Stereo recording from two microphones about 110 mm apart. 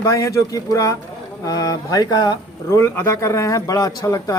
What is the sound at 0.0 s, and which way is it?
A woman's voice, 30° left (ahead or behind).